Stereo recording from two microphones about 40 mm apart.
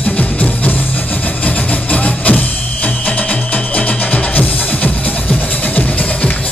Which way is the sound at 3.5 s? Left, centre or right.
Left.